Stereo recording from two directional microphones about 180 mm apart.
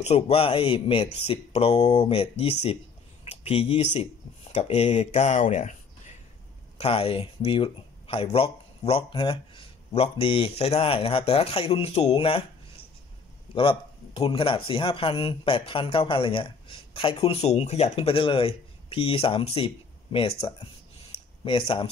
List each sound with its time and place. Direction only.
0.0 s speech: 35° left (ahead or behind)
6.8 s speech: 30° left (ahead or behind)